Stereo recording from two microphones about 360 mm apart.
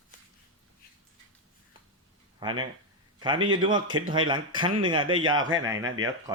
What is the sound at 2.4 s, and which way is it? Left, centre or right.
A man's voice, centre.